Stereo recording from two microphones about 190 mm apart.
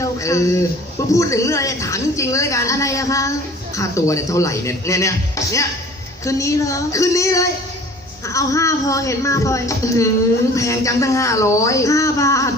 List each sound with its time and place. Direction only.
0.0 s a woman's voice: 15° left (ahead or behind)